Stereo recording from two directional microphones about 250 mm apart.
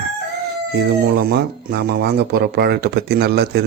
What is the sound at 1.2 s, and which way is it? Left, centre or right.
Speech, right.